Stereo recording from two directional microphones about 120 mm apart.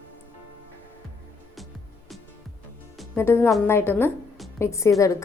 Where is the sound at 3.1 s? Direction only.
20° left (ahead or behind).